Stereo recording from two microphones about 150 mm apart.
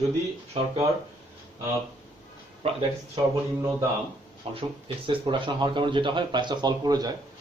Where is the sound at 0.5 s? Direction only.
40° right (ahead or behind).